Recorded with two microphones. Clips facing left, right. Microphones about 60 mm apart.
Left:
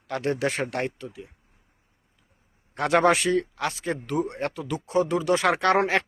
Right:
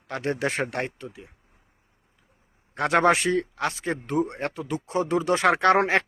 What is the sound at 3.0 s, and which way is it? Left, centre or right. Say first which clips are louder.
A man's voice: right 1 dB; right.